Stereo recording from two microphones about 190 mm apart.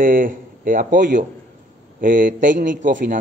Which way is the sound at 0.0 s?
45° right (ahead or behind).